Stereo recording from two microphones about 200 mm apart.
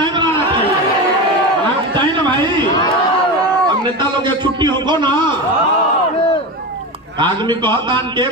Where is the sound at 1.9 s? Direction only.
25° right (ahead or behind).